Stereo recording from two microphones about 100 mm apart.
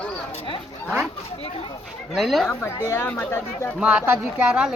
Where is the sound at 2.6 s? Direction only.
25° left (ahead or behind).